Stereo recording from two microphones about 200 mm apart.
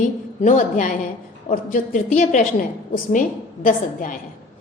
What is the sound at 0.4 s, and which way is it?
A woman's voice, 40° left (ahead or behind).